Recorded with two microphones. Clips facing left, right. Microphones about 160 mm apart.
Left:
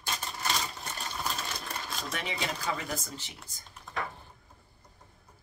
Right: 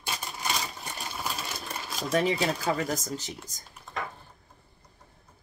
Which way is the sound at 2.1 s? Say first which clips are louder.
Right 11 dB; 40° right (ahead or behind).